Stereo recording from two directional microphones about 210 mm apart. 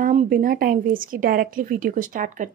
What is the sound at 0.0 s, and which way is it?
A woman's voice, 40° right (ahead or behind).